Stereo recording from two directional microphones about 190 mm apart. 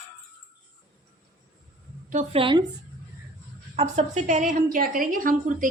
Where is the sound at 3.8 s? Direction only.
35° right (ahead or behind).